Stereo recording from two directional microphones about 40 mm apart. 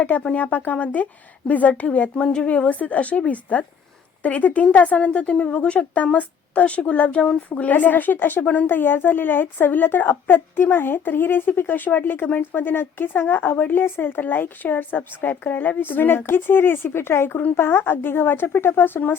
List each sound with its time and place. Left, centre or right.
0.1 s speech: left
2.6 s a woman's voice: left
15.8 s a woman's voice: left